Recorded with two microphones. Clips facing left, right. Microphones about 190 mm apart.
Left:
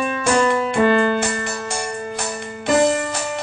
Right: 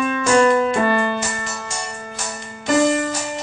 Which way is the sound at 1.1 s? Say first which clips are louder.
Left 4 dB; 60° left (ahead or behind).